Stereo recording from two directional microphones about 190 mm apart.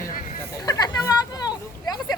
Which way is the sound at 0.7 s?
20° left (ahead or behind).